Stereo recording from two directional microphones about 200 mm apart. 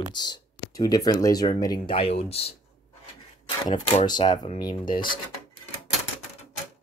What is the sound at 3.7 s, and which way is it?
Speech, 20° left (ahead or behind).